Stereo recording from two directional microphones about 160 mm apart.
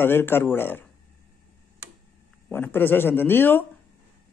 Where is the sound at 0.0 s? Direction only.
15° left (ahead or behind).